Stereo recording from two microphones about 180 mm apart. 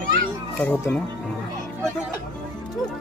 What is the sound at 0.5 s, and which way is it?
Speech, 5° left (ahead or behind).